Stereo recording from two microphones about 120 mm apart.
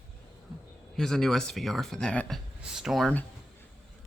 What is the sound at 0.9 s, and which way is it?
Speech, 5° left (ahead or behind).